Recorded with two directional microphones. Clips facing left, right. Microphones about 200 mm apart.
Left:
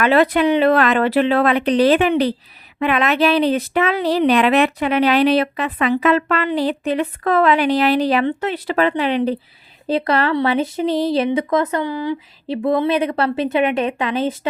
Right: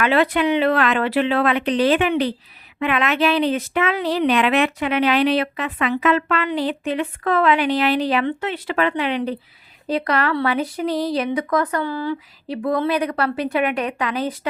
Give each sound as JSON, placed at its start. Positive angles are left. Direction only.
{"t": 0.0, "sound": "a woman's voice", "side_deg": 40}